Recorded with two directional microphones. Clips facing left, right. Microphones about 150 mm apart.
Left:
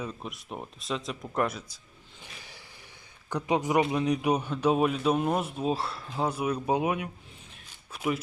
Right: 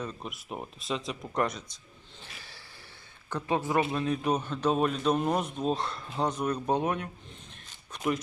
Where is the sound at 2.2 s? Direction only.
15° left (ahead or behind).